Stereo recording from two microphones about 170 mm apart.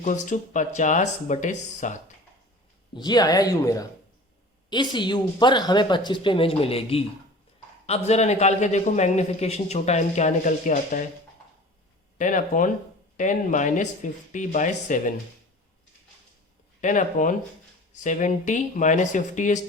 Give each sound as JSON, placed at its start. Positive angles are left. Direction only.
{"t": 0.0, "sound": "speech", "side_deg": 45}
{"t": 2.9, "sound": "a man's voice", "side_deg": 25}
{"t": 12.1, "sound": "speech", "side_deg": 50}
{"t": 16.8, "sound": "speech", "side_deg": 50}